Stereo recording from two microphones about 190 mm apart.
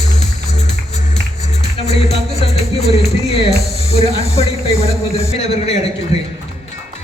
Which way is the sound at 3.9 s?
35° left (ahead or behind).